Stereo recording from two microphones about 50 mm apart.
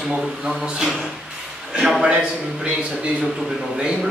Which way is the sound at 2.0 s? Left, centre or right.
Centre.